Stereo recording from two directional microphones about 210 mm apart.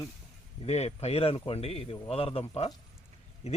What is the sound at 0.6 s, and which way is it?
A man's voice, 30° left (ahead or behind).